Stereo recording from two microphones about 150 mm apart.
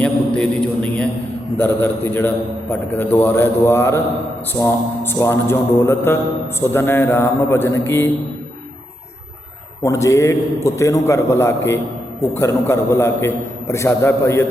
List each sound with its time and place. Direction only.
0.0 s a sound: 5° left (ahead or behind)
1.5 s a man's voice: 15° left (ahead or behind)
9.8 s a man's voice: 20° left (ahead or behind)